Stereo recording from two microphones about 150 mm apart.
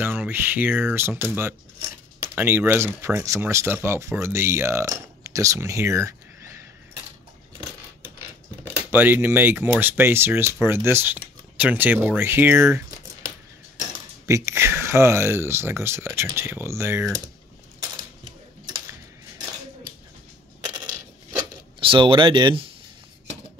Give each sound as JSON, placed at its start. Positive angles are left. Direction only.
{"t": 0.0, "sound": "speech", "side_deg": -10}
{"t": 8.9, "sound": "speech", "side_deg": -15}
{"t": 21.7, "sound": "speech", "side_deg": -35}